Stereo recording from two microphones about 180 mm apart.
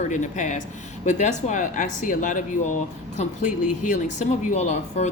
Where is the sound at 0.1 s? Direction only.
45° left (ahead or behind).